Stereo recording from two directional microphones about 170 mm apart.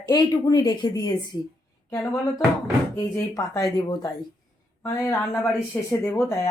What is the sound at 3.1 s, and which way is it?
Speech, 20° left (ahead or behind).